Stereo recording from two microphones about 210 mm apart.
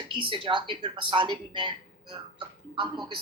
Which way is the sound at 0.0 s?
25° right (ahead or behind).